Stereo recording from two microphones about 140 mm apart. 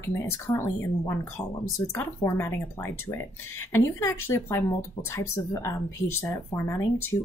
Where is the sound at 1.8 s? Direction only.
20° left (ahead or behind).